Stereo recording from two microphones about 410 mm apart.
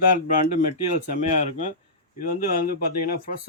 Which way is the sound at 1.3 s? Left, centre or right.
Centre.